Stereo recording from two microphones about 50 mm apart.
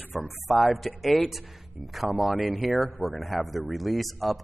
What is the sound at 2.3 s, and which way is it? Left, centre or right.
Speech, right.